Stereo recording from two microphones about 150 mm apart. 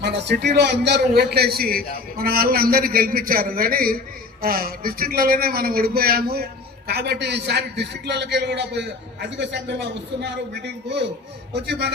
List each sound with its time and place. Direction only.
0.0 s a man's voice: 90° right
11.6 s a man's voice: 90° right